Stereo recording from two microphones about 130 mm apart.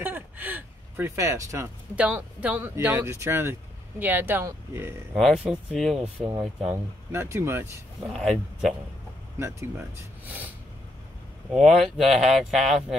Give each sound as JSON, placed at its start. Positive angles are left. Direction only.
{"t": 0.0, "sound": "a sound", "side_deg": -15}
{"t": 2.0, "sound": "speech", "side_deg": -10}
{"t": 5.1, "sound": "speech", "side_deg": -5}
{"t": 6.7, "sound": "speech", "side_deg": -20}
{"t": 8.1, "sound": "speech", "side_deg": -5}
{"t": 9.4, "sound": "speech", "side_deg": -20}
{"t": 11.5, "sound": "speech", "side_deg": 0}